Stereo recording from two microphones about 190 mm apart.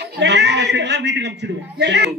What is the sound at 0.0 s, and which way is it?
A man's voice, 65° right (ahead or behind).